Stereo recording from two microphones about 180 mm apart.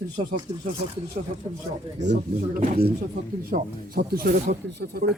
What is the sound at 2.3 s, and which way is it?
Speech, 40° right (ahead or behind).